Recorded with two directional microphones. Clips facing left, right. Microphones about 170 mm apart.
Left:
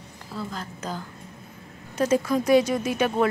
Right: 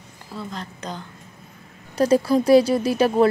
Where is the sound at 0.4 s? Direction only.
5° left (ahead or behind).